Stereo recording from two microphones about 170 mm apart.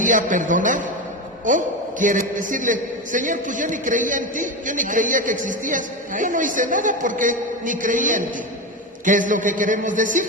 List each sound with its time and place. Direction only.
0.0 s a man's voice: 50° right (ahead or behind)